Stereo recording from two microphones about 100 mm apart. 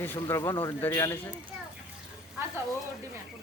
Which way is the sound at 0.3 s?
30° left (ahead or behind).